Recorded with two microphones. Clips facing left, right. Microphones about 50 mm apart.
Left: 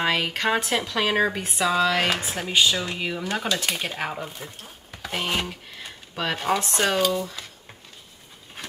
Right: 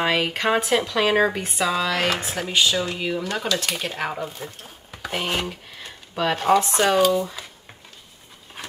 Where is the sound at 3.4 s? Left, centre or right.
Left.